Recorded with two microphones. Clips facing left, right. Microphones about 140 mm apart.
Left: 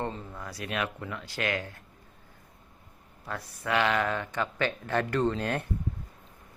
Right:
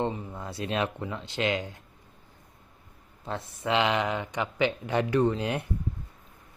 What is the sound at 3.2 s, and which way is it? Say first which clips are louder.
Speech: right 3 dB; 25° right (ahead or behind).